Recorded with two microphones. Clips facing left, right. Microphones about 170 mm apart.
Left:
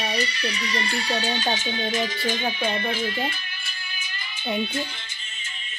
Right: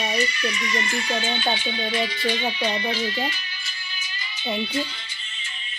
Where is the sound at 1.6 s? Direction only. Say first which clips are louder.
Even; 45° left (ahead or behind).